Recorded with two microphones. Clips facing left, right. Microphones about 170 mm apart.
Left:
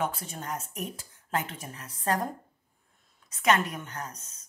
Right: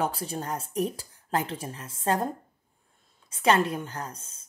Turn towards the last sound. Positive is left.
turn(degrees=-30)  # may be behind; listen again after turning